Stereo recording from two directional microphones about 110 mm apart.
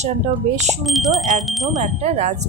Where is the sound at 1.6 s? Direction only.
85° right.